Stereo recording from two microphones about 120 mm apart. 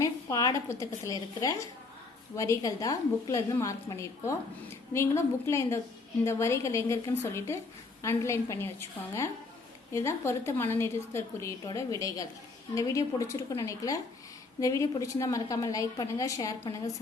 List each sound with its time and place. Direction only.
0.0 s a woman's voice: 30° left (ahead or behind)